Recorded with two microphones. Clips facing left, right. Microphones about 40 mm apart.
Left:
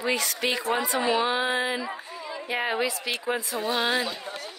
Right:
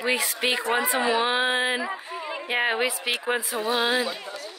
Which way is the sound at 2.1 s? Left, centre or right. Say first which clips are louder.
Right 4 dB; right.